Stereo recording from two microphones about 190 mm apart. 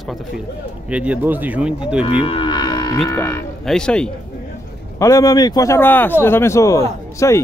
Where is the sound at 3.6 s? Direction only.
5° left (ahead or behind).